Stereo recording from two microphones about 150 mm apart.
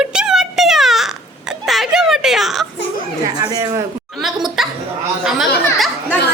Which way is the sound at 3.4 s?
25° right (ahead or behind).